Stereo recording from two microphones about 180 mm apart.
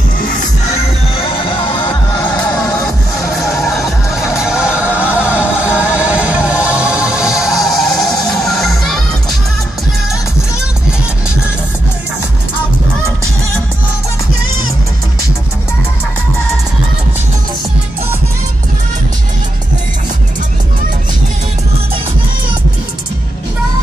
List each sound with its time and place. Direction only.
1.1 s music: 30° left (ahead or behind)
3.6 s music: centre (ahead or behind)
8.1 s music: 20° left (ahead or behind)
8.5 s music: centre (ahead or behind)